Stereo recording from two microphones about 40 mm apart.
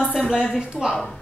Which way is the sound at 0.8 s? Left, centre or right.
Centre.